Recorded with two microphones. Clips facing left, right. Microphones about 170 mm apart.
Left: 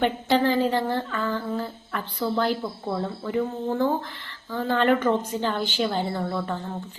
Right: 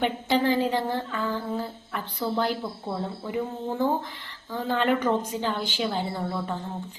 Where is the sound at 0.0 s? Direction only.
10° right (ahead or behind).